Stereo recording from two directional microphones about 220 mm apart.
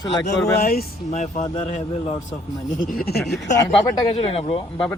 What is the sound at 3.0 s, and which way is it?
Speech, 45° left (ahead or behind).